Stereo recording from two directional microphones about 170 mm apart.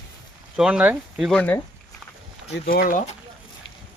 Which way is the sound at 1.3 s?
5° left (ahead or behind).